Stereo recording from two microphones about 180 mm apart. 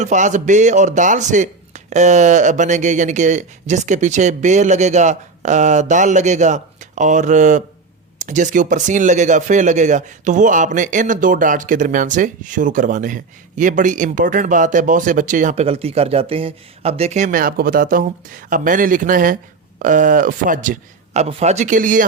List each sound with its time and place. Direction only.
0.0 s speech: 45° right (ahead or behind)